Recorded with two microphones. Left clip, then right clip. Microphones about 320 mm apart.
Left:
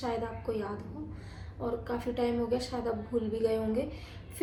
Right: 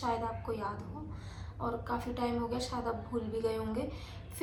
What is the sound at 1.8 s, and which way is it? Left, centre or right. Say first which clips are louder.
A woman's voice: left 6 dB; right.